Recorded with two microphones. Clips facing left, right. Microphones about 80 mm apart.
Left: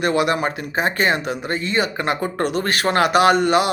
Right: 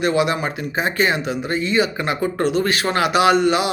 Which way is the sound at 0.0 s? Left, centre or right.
Left.